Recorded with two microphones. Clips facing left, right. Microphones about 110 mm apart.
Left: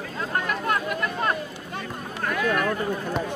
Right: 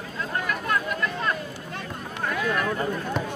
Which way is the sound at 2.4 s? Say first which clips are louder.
Left 2 dB; 10° right (ahead or behind).